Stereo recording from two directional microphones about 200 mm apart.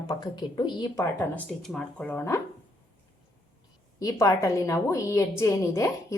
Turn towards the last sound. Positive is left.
turn(degrees=15)  # may be behind; listen again after turning